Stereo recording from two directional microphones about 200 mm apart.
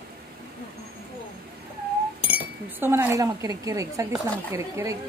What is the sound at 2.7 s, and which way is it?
A woman's voice, 10° right (ahead or behind).